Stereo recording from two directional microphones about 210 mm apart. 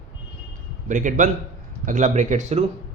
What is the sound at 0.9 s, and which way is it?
A man's voice, 35° right (ahead or behind).